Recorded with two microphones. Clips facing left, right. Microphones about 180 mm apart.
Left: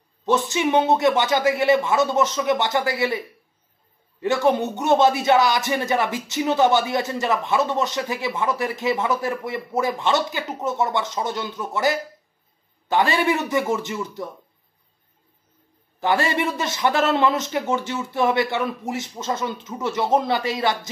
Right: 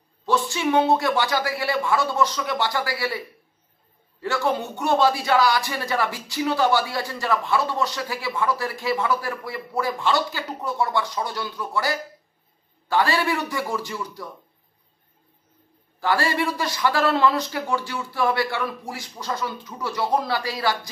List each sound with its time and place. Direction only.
0.2 s speech: 20° left (ahead or behind)
16.0 s speech: 20° left (ahead or behind)